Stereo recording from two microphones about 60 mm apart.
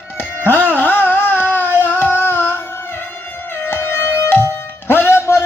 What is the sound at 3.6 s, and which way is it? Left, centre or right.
Music, left.